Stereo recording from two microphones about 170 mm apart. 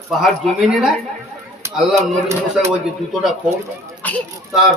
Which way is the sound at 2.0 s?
15° right (ahead or behind).